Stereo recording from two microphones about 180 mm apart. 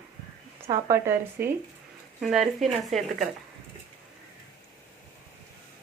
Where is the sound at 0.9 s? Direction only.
15° right (ahead or behind).